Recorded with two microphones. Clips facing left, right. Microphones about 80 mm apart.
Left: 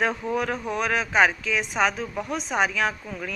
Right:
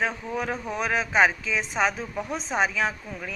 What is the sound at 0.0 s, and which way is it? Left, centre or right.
Speech, centre.